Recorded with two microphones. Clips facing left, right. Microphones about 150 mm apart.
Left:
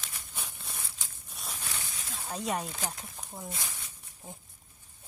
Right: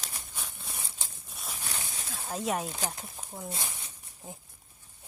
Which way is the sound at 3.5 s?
25° right (ahead or behind).